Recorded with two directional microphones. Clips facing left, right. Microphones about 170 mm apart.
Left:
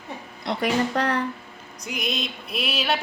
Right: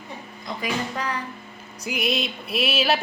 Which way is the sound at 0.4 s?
70° left (ahead or behind).